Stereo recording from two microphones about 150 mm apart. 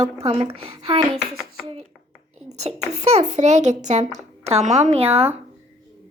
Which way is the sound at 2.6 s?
45° right (ahead or behind).